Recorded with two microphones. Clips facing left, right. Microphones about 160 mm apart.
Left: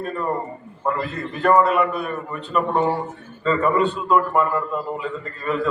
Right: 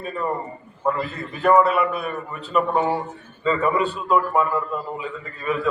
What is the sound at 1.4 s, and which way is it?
A man's voice, 5° right (ahead or behind).